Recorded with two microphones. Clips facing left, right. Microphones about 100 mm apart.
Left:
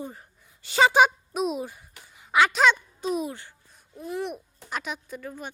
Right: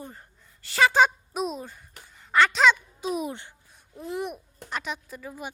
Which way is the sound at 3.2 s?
20° right (ahead or behind).